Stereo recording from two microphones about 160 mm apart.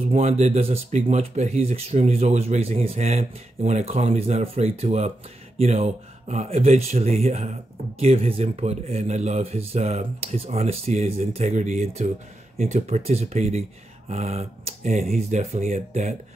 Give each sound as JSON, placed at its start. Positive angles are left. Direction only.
{"t": 0.0, "sound": "speech", "side_deg": -40}